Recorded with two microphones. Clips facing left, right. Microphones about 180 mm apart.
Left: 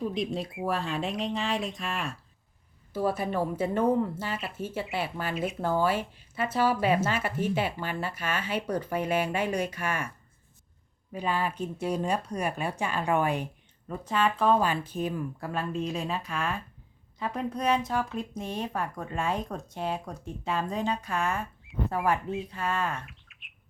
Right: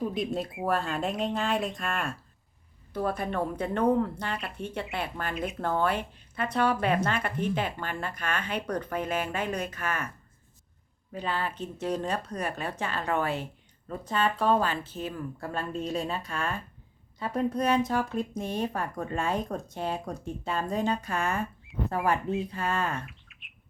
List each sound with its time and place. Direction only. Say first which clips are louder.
0.0 s speech: right 1 dB; centre (ahead or behind)
11.1 s speech: left 2 dB; 10° left (ahead or behind)
14.6 s speech: left 2 dB; 15° left (ahead or behind)
15.9 s speech: right 1 dB; centre (ahead or behind)